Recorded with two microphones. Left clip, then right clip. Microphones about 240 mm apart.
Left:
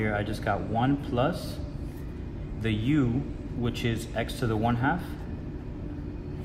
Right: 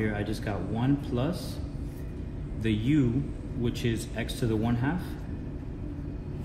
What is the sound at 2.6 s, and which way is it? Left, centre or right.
Speech, left.